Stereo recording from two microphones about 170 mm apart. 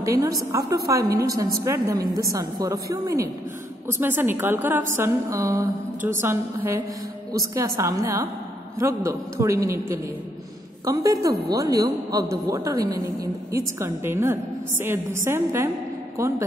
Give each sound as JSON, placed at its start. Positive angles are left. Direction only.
{"t": 0.0, "sound": "a woman's voice", "side_deg": -20}
{"t": 1.0, "sound": "a woman's voice", "side_deg": -65}
{"t": 1.3, "sound": "a woman's voice", "side_deg": -15}
{"t": 9.4, "sound": "a woman's voice", "side_deg": -20}